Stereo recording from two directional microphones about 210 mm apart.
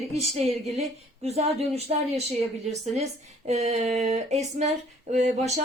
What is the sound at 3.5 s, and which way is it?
Speech, 30° right (ahead or behind).